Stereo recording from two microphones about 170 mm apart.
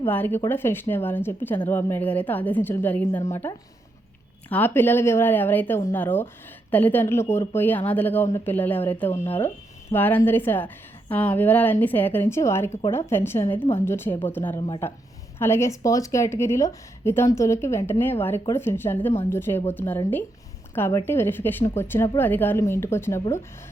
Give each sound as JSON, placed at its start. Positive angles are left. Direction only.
{"t": 0.0, "sound": "speech", "side_deg": 10}